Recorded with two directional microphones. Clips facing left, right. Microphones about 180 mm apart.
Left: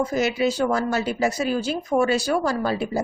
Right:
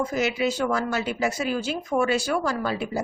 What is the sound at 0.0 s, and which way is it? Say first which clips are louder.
Speech: left 3 dB; 35° left (ahead or behind).